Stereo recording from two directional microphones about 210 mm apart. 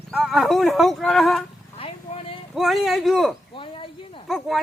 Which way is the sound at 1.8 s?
25° left (ahead or behind).